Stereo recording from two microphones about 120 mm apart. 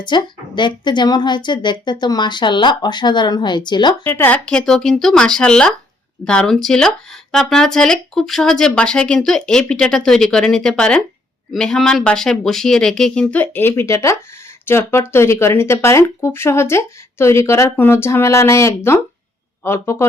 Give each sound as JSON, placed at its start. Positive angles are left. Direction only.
{"t": 0.0, "sound": "a woman's voice", "side_deg": 40}
{"t": 4.0, "sound": "speech", "side_deg": 15}